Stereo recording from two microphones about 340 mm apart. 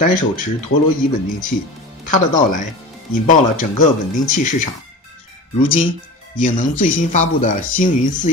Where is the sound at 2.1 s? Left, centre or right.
Left.